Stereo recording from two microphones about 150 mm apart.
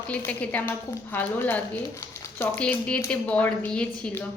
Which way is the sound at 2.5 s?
10° left (ahead or behind).